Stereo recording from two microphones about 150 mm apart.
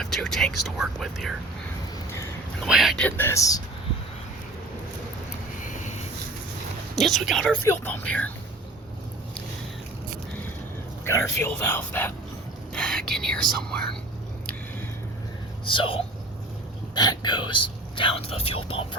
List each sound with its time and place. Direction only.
0.0 s speech: 5° left (ahead or behind)
2.6 s speech: 5° right (ahead or behind)
3.0 s speech: 15° left (ahead or behind)
5.6 s a sound: 55° left (ahead or behind)
6.9 s speech: centre (ahead or behind)
7.6 s speech: 15° left (ahead or behind)
11.0 s speech: 15° left (ahead or behind)
15.6 s speech: 35° left (ahead or behind)